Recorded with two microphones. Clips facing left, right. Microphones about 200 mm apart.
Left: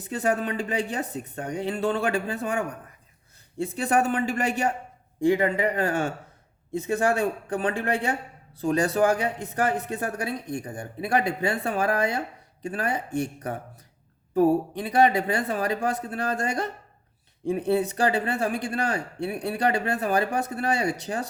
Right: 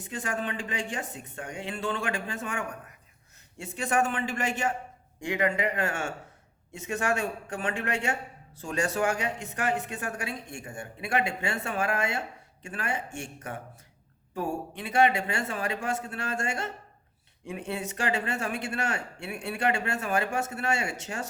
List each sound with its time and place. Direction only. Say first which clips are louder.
0.0 s a man's voice: left 7 dB; 40° left (ahead or behind)